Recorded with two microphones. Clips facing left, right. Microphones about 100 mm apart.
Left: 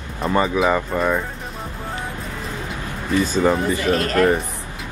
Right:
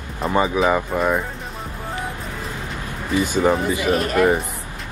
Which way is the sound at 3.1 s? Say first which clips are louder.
Even; 15° right (ahead or behind).